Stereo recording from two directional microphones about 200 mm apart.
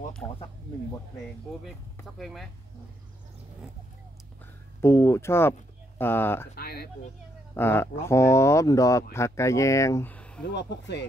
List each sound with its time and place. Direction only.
2.1 s speech: centre (ahead or behind)
4.8 s speech: 15° left (ahead or behind)
6.5 s speech: 50° left (ahead or behind)
7.5 s speech: 10° left (ahead or behind)
10.5 s speech: 60° left (ahead or behind)